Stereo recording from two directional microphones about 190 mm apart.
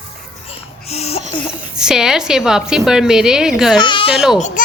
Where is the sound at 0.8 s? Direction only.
35° left (ahead or behind).